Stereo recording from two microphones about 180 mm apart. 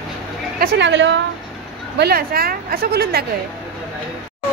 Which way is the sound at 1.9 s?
60° right (ahead or behind).